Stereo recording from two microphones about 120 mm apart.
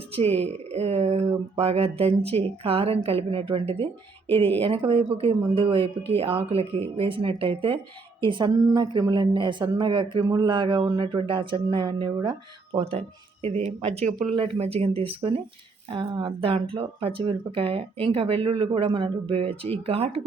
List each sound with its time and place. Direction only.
0.1 s a woman's voice: 55° right (ahead or behind)
4.9 s speech: 50° right (ahead or behind); by 14.3 s 80° right
14.3 s speech: 50° right (ahead or behind)